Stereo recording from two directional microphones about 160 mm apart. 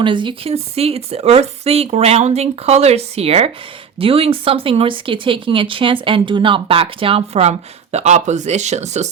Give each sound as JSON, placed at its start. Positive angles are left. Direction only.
{"t": 0.0, "sound": "speech", "side_deg": -30}